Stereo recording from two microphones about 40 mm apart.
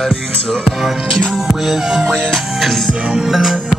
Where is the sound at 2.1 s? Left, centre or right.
Centre.